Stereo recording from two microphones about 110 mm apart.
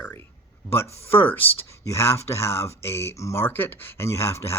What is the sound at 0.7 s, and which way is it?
Speech, 20° left (ahead or behind).